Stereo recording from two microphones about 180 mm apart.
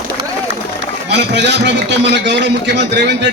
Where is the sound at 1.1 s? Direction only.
75° right (ahead or behind).